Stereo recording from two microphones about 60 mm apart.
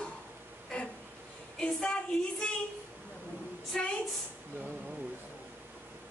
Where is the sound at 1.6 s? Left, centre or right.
Centre.